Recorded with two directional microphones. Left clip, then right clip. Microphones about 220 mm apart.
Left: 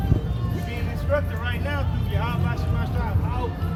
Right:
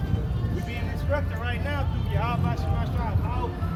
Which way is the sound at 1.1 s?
Centre (ahead or behind).